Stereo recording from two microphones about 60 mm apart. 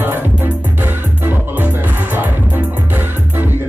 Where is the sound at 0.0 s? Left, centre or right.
Right.